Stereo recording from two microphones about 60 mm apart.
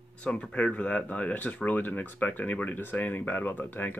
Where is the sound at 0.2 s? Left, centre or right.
Centre.